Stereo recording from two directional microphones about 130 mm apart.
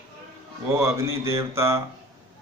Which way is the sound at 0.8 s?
20° right (ahead or behind).